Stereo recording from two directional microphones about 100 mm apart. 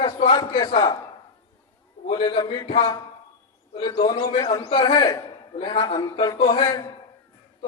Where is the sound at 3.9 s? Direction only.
85° left.